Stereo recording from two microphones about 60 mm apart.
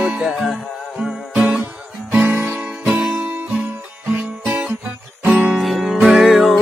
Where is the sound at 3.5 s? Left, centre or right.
Centre.